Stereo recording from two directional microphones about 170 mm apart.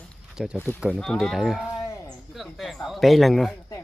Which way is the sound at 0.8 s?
Centre (ahead or behind).